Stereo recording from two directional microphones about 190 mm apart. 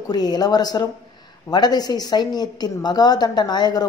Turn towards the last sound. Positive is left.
turn(degrees=20)  # may be behind; listen again after turning